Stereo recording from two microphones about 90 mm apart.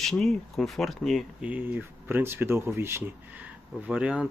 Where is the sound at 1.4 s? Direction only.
20° right (ahead or behind).